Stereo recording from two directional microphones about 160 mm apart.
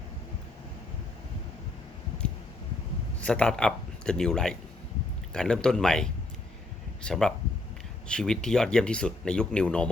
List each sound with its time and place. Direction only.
3.2 s speech: 5° left (ahead or behind)